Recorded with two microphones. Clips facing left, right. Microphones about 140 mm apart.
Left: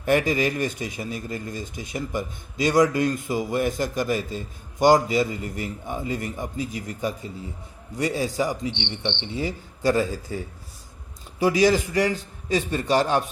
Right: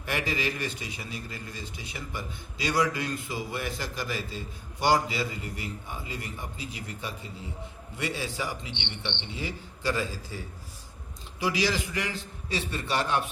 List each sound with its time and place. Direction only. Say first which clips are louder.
0.0 s a man's voice: left 9 dB; 45° left (ahead or behind)
11.3 s a man's voice: left 9 dB; 45° left (ahead or behind)